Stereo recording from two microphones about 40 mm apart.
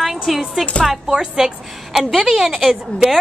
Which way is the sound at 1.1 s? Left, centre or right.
Centre.